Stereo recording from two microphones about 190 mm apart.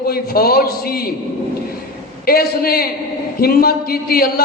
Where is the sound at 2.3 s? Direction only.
55° left (ahead or behind).